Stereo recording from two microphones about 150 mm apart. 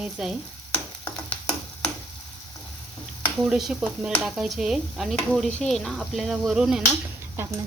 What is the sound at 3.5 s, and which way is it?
Speech, centre (ahead or behind).